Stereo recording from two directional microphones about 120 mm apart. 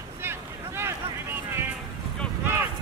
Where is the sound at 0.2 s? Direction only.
20° right (ahead or behind).